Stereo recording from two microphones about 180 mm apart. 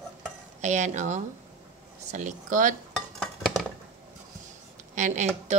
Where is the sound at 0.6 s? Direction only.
40° right (ahead or behind).